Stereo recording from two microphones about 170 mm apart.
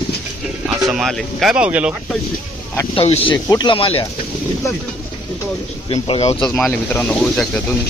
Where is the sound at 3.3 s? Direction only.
20° left (ahead or behind).